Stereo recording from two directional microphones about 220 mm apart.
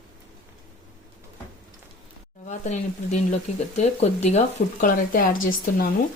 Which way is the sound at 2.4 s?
30° left (ahead or behind).